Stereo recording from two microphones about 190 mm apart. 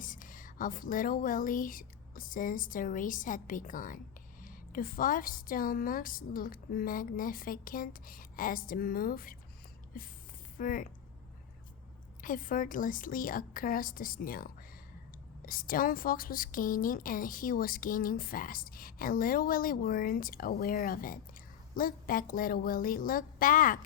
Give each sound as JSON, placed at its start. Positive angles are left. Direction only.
{"t": 0.0, "sound": "speech", "side_deg": 45}
{"t": 12.2, "sound": "speech", "side_deg": 45}